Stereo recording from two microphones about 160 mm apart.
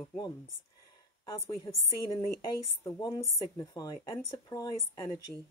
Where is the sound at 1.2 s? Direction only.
20° left (ahead or behind).